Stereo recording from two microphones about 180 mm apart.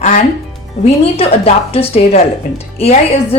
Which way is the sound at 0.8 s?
35° left (ahead or behind).